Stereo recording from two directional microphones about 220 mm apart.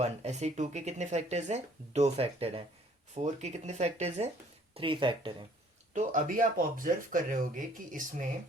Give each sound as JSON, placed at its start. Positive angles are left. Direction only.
{"t": 0.0, "sound": "speech", "side_deg": -30}
{"t": 5.9, "sound": "speech", "side_deg": -35}